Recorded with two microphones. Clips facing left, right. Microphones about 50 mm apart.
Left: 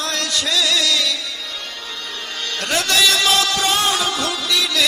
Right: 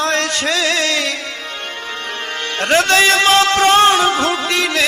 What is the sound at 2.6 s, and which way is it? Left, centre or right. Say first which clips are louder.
Speech: right 6 dB; right.